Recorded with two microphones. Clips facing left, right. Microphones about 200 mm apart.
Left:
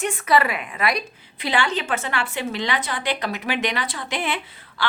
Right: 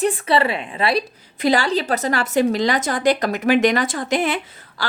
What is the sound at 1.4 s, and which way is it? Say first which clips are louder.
A woman's voice: right 6 dB; 40° right (ahead or behind).